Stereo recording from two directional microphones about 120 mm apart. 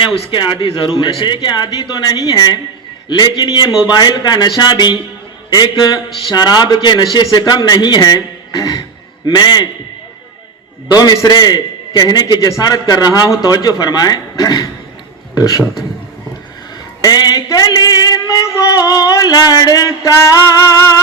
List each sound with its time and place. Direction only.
0.0 s a man's voice: 50° left (ahead or behind)
9.2 s a man's voice: 35° left (ahead or behind)
10.9 s a man's voice: 35° left (ahead or behind)
15.4 s music: 30° left (ahead or behind)
17.0 s a man's voice: 35° left (ahead or behind)
20.2 s music: 25° left (ahead or behind)